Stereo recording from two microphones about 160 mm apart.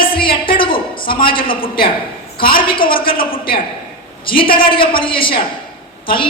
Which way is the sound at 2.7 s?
30° left (ahead or behind).